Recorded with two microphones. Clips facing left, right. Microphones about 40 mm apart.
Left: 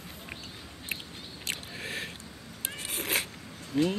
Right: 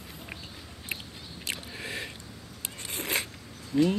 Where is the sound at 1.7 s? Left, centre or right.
Centre.